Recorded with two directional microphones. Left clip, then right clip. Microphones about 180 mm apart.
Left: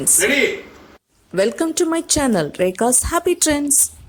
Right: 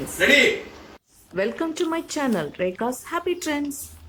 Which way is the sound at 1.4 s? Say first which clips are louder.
Left 7 dB; 35° left (ahead or behind).